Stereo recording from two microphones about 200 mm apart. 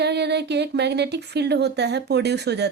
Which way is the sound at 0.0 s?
55° right (ahead or behind).